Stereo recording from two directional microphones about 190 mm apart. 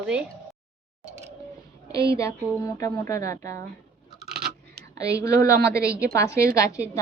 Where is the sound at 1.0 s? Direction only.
35° right (ahead or behind).